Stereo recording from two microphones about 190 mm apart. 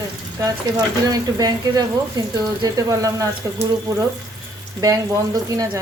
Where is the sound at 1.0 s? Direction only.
20° right (ahead or behind).